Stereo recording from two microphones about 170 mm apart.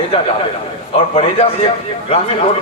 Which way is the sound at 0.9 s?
35° left (ahead or behind).